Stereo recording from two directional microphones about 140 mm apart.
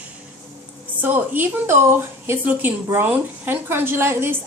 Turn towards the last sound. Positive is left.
turn(degrees=-20)  # may be behind; listen again after turning